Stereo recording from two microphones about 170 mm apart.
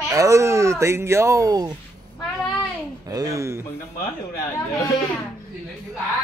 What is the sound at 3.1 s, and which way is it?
Speech, 20° right (ahead or behind).